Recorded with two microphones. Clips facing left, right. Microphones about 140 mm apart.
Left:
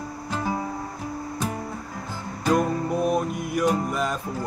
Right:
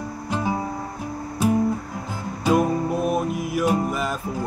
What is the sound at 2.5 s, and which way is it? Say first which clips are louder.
Music: right 2 dB; 5° right (ahead or behind).